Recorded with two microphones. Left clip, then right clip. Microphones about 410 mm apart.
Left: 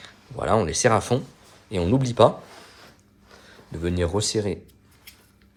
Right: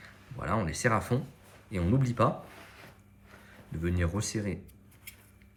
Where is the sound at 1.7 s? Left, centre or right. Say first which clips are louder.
Left 9 dB; centre.